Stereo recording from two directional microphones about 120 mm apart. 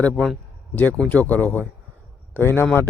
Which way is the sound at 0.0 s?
10° left (ahead or behind).